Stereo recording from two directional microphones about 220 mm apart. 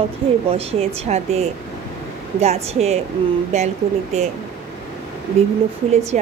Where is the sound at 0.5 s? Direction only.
25° right (ahead or behind).